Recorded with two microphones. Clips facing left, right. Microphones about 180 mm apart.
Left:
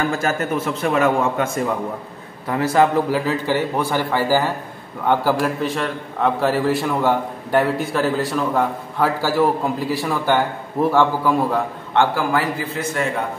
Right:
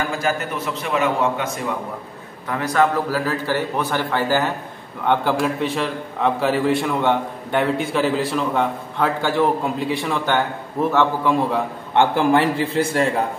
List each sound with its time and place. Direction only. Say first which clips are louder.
0.2 s a man's voice: left 2 dB; 50° left (ahead or behind)
2.4 s a man's voice: left 2 dB; 30° left (ahead or behind)
3.3 s a man's voice: left 2 dB; 15° left (ahead or behind)
11.9 s a man's voice: right 2 dB; 20° right (ahead or behind)